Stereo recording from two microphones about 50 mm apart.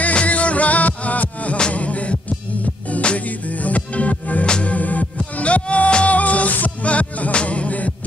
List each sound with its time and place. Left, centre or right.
0.0 s music: left
4.5 s music: centre
4.7 s music: left